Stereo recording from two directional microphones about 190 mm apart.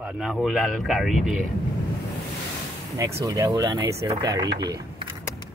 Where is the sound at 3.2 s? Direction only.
15° right (ahead or behind).